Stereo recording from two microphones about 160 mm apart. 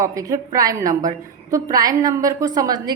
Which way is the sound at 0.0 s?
20° right (ahead or behind).